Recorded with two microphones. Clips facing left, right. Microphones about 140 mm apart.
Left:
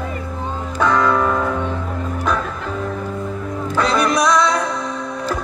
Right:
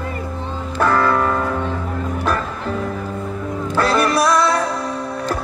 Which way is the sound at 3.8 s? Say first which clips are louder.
Right 1 dB; 5° right (ahead or behind).